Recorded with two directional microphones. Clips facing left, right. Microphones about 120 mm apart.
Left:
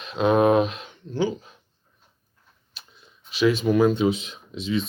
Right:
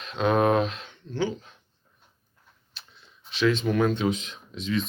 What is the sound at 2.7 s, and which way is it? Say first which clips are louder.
Speech: left 1 dB; 10° left (ahead or behind).